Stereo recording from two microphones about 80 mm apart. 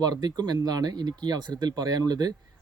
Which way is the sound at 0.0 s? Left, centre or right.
Right.